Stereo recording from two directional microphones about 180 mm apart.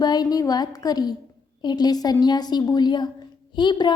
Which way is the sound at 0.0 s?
20° left (ahead or behind).